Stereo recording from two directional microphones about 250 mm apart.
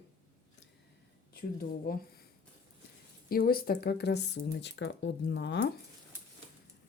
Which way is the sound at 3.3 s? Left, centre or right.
Left.